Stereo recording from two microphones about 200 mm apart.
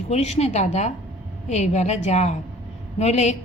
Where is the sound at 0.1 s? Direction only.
35° left (ahead or behind).